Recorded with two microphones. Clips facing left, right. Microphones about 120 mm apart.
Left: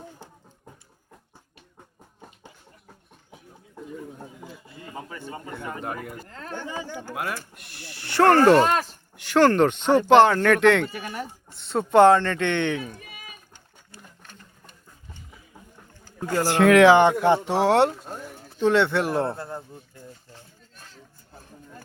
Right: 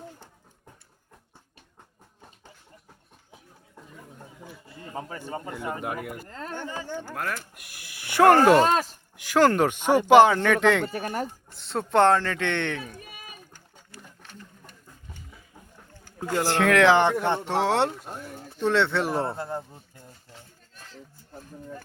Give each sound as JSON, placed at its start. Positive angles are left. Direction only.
{"t": 4.9, "sound": "speech", "side_deg": -35}
{"t": 5.8, "sound": "speech", "side_deg": -5}
{"t": 6.7, "sound": "speech", "side_deg": 10}
{"t": 7.5, "sound": "speech", "side_deg": -10}
{"t": 10.9, "sound": "speech", "side_deg": -40}
{"t": 11.5, "sound": "speech", "side_deg": 0}
{"t": 16.3, "sound": "speech", "side_deg": 5}
{"t": 19.4, "sound": "speech", "side_deg": -25}